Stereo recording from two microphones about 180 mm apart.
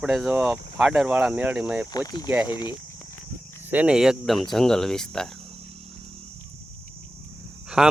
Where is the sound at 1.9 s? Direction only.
20° left (ahead or behind).